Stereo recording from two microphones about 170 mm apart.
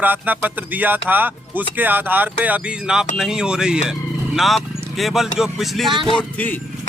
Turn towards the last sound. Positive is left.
turn(degrees=10)  # may be behind; listen again after turning